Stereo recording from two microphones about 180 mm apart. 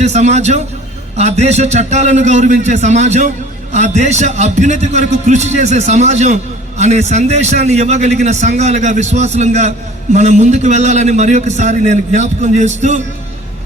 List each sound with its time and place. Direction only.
0.0 s a man's voice: 40° right (ahead or behind)